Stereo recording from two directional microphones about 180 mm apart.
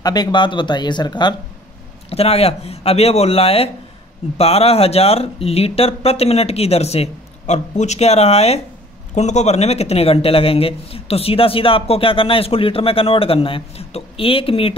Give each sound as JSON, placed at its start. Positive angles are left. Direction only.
{"t": 0.0, "sound": "a man's voice", "side_deg": 20}